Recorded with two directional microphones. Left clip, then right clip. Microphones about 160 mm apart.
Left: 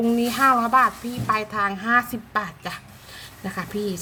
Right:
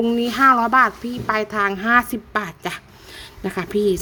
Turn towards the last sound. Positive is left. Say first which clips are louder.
# right 6 dB
turn(degrees=-55)  # may be behind; listen again after turning